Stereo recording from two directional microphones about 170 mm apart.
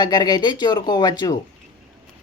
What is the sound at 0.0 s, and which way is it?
Speech, 25° left (ahead or behind).